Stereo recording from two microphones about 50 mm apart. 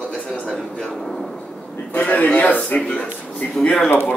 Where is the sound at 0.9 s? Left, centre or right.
Centre.